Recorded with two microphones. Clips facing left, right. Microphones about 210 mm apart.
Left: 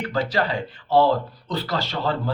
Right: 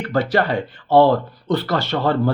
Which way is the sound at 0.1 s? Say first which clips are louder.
Right 6 dB; 60° right (ahead or behind).